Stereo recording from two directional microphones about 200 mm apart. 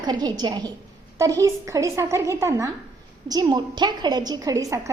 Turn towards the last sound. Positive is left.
turn(degrees=-15)  # may be behind; listen again after turning